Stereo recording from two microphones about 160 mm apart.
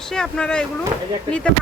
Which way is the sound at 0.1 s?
5° left (ahead or behind).